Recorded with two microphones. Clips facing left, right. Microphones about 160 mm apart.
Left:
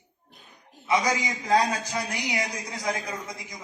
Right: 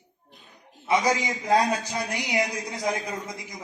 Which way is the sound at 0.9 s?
25° right (ahead or behind).